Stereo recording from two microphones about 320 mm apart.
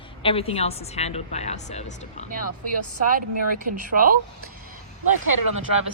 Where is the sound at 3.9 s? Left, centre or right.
Right.